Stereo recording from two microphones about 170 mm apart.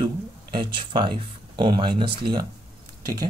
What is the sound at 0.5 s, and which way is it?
Speech, 30° right (ahead or behind).